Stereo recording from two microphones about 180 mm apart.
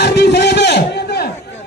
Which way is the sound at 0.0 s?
65° left (ahead or behind).